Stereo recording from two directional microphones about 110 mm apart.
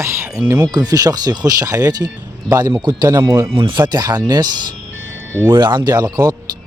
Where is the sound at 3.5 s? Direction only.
45° right (ahead or behind).